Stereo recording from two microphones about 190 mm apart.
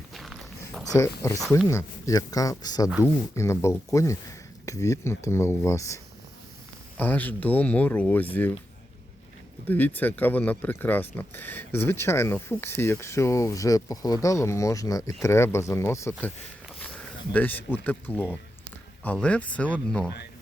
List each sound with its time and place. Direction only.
0.1 s a sound: centre (ahead or behind)
0.9 s speech: 15° left (ahead or behind)
9.6 s speech: 10° left (ahead or behind)
17.3 s speech: 10° left (ahead or behind)